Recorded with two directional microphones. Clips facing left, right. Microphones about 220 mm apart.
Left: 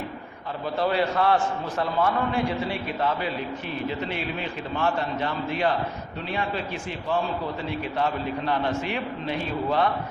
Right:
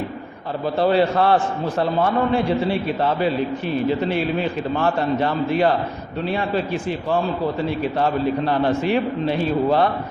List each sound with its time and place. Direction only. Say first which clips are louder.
0.8 s a man's voice: right 6 dB; 30° right (ahead or behind)
7.9 s a man's voice: right 6 dB; 35° right (ahead or behind)